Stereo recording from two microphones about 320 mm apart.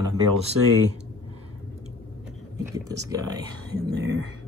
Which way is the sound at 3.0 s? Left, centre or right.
Centre.